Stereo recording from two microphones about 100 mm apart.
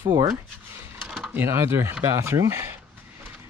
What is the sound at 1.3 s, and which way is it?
Speech, 25° right (ahead or behind).